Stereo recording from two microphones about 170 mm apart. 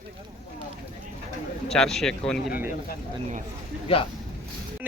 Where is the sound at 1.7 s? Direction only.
5° left (ahead or behind).